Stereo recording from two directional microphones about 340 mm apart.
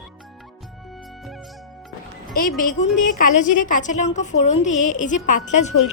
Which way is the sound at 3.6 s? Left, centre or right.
Left.